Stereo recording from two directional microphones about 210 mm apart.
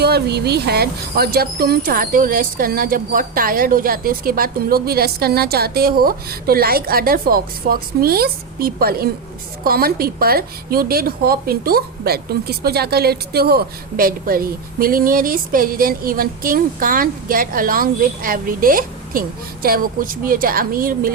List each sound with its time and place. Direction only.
0.0 s speech: 50° right (ahead or behind)